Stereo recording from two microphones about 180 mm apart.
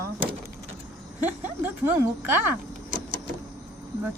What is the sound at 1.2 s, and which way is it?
A woman's voice, 10° right (ahead or behind).